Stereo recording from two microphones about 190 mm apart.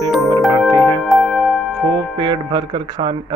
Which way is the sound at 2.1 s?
25° right (ahead or behind).